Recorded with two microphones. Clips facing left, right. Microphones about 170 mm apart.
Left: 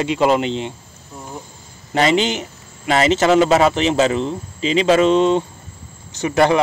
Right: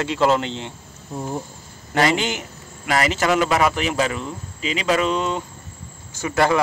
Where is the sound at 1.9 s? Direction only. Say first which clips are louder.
Left 3 dB; 20° left (ahead or behind).